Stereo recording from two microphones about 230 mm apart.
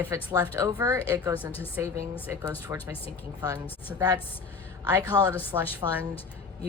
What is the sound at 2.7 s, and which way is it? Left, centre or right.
A woman's voice, centre.